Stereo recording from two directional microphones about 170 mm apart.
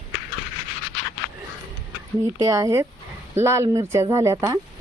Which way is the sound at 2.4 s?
20° right (ahead or behind).